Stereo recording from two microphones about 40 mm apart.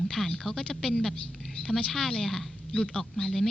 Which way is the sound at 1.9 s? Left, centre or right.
Centre.